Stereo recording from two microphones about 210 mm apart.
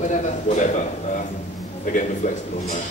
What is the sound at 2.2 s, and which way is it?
Speech, 35° left (ahead or behind).